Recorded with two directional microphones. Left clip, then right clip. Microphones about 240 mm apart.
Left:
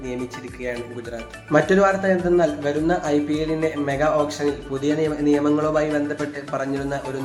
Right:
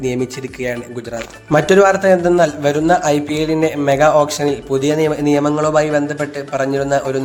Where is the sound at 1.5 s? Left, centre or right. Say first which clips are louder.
Right 6 dB; right.